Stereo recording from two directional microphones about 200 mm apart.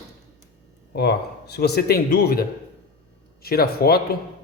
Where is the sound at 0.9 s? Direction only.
55° left (ahead or behind).